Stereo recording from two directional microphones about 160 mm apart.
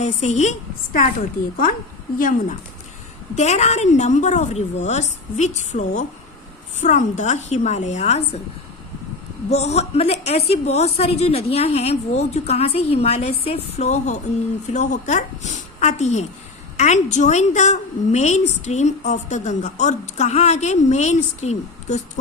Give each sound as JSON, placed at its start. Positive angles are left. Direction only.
{"t": 0.0, "sound": "a woman's voice", "side_deg": 45}
{"t": 2.1, "sound": "speech", "side_deg": 55}
{"t": 3.3, "sound": "a woman's voice", "side_deg": 45}
{"t": 9.5, "sound": "a woman's voice", "side_deg": 40}